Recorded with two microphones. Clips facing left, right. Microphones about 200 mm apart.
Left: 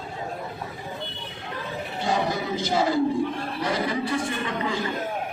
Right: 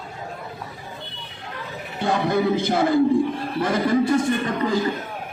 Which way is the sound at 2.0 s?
60° right (ahead or behind).